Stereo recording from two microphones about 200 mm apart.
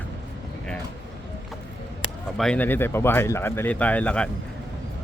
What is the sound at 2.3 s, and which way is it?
Speech, 5° left (ahead or behind).